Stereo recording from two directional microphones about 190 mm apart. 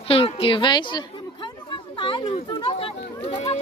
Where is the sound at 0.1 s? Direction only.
30° left (ahead or behind).